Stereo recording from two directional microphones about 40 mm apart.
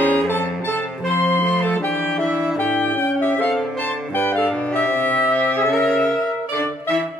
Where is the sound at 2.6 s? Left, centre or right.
Left.